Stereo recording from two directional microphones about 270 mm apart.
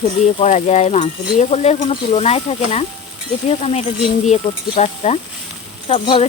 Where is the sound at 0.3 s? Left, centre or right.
Left.